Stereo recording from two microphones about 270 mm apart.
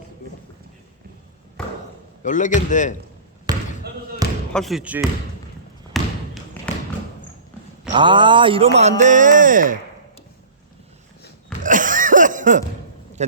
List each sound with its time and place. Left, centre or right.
2.2 s speech: left
3.5 s basketball bounce: centre
4.5 s speech: centre
5.9 s basketball bounce: centre
7.9 s speech: centre
11.6 s cough: right